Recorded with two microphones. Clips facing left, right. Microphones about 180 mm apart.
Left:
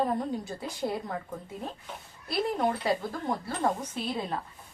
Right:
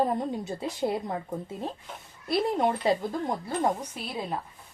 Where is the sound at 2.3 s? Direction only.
25° right (ahead or behind).